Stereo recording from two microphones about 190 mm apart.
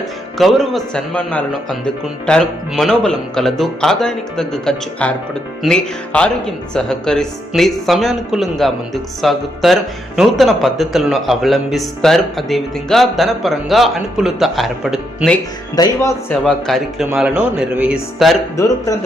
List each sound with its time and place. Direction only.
0.3 s speech: centre (ahead or behind)
15.7 s speech: 20° left (ahead or behind); by 18.3 s centre (ahead or behind)
18.5 s speech: 15° left (ahead or behind)